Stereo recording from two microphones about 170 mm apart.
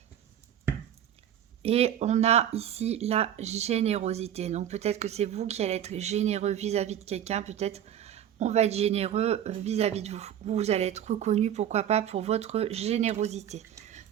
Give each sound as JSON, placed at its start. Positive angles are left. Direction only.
{"t": 1.6, "sound": "speech", "side_deg": -35}